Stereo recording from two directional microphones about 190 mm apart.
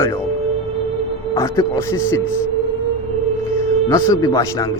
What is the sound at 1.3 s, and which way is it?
Speech, 15° left (ahead or behind).